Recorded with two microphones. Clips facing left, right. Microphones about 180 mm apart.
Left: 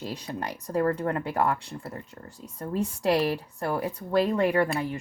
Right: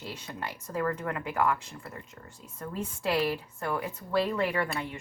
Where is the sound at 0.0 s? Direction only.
40° left (ahead or behind).